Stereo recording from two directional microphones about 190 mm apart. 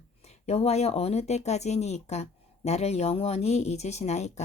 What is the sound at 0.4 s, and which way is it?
Speech, 35° left (ahead or behind).